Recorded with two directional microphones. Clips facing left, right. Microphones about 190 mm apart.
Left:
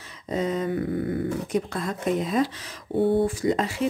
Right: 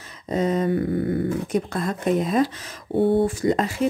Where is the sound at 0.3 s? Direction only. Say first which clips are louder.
Right 4 dB; 45° right (ahead or behind).